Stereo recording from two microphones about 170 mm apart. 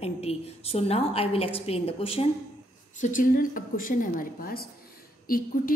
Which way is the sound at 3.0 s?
50° left (ahead or behind).